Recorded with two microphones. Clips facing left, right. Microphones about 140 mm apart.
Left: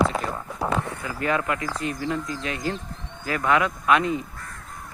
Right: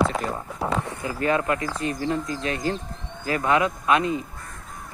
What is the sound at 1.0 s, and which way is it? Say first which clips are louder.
Speech: right 4 dB; 30° right (ahead or behind).